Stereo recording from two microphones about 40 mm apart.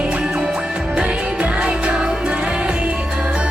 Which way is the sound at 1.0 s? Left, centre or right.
Right.